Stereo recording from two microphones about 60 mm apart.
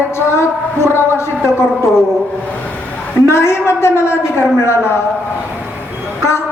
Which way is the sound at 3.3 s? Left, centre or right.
Left.